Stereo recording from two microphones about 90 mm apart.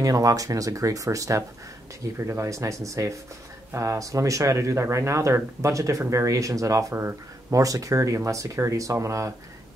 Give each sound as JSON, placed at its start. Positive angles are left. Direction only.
{"t": 0.0, "sound": "speech", "side_deg": -40}